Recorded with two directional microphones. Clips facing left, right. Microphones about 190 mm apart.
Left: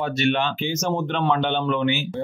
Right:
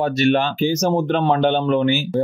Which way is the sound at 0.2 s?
40° right (ahead or behind).